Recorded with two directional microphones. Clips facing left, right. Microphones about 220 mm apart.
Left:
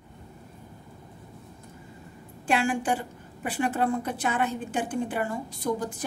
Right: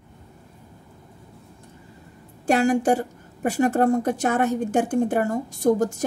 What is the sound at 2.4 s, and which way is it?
A woman's voice, 40° right (ahead or behind).